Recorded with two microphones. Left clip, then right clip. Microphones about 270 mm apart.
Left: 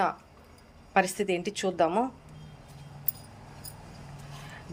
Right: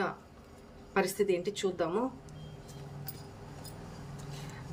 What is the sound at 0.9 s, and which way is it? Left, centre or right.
A woman's voice, centre.